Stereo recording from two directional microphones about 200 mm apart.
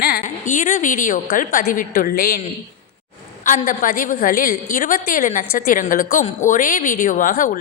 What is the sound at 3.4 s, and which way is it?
A woman's voice, 40° left (ahead or behind).